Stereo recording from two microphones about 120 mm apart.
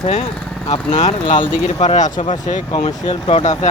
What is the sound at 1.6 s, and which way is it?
Speech, 75° left (ahead or behind).